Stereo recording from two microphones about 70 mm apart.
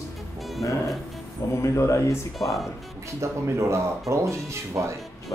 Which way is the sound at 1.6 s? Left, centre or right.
Left.